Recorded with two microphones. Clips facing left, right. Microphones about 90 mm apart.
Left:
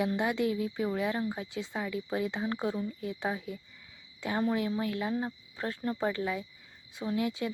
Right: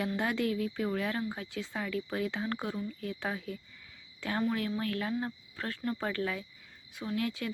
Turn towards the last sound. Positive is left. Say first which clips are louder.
# left 3 dB
turn(degrees=20)  # may be behind; listen again after turning